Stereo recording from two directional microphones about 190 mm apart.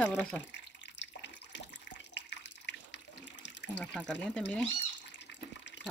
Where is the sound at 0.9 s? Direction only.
65° left (ahead or behind).